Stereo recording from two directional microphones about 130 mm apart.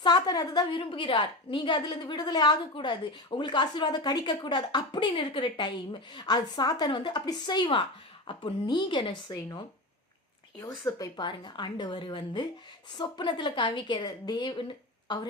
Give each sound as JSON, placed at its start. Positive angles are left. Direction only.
{"t": 0.0, "sound": "a woman's voice", "side_deg": 30}
{"t": 10.8, "sound": "a woman's voice", "side_deg": 30}